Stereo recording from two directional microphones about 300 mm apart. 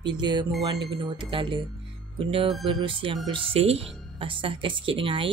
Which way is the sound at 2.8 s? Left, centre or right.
Centre.